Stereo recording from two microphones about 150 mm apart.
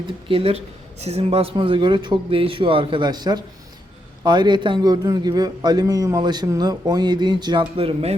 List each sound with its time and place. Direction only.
0.3 s a man's voice: 35° right (ahead or behind)